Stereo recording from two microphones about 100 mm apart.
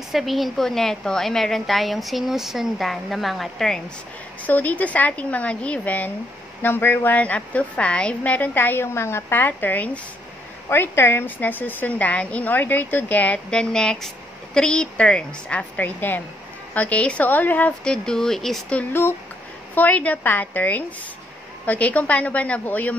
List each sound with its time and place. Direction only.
0.1 s a woman's voice: centre (ahead or behind)
4.4 s a woman's voice: 15° left (ahead or behind)